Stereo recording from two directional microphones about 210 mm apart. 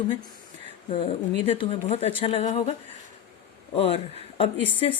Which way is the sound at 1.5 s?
25° left (ahead or behind).